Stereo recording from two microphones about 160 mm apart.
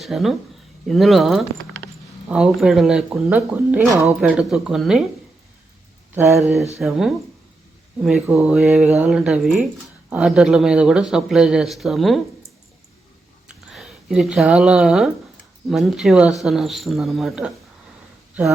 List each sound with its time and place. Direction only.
0.0 s speech: centre (ahead or behind)
6.1 s a sound: 15° right (ahead or behind)
6.7 s speech: centre (ahead or behind)
13.7 s speech: centre (ahead or behind)